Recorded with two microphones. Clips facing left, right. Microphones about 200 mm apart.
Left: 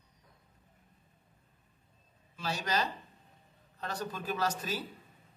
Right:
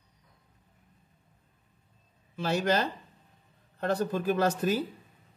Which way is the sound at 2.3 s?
55° right (ahead or behind).